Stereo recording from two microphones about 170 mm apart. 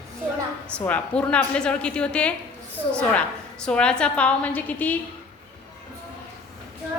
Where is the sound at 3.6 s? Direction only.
5° left (ahead or behind).